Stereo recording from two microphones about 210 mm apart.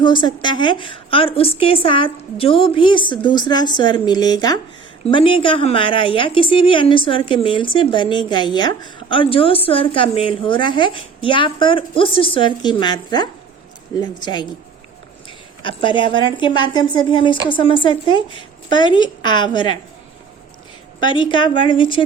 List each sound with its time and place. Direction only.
0.0 s a woman's voice: 20° left (ahead or behind)
21.0 s a woman's voice: 25° left (ahead or behind)